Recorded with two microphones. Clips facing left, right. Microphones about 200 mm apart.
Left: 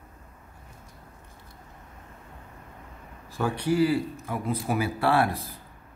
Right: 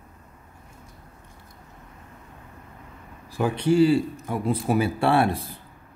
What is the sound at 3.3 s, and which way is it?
Speech, 20° right (ahead or behind).